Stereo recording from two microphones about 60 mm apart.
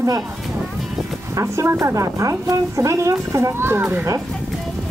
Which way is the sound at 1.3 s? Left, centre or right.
Right.